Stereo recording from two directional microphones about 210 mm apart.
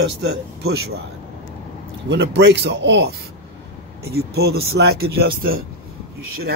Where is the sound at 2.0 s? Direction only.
55° right (ahead or behind).